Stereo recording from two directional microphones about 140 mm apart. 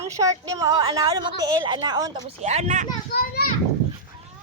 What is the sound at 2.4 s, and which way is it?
Speech, 50° right (ahead or behind).